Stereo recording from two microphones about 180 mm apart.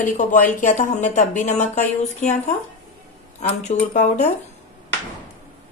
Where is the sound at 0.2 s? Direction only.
45° left (ahead or behind).